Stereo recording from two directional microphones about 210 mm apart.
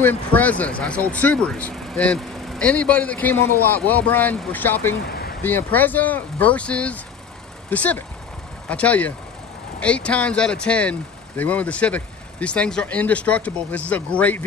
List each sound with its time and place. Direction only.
0.0 s speech: 10° left (ahead or behind)
5.0 s vehicle: 45° left (ahead or behind)
5.4 s speech: 10° left (ahead or behind)